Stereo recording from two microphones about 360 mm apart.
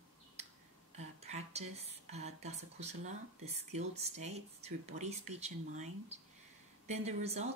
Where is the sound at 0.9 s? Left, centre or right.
Centre.